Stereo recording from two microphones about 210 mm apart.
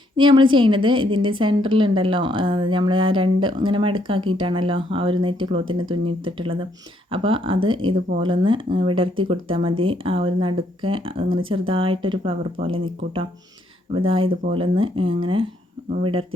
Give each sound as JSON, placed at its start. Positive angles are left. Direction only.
{"t": 0.2, "sound": "a woman's voice", "side_deg": -25}